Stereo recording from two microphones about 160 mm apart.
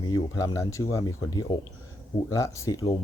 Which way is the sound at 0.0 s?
20° left (ahead or behind).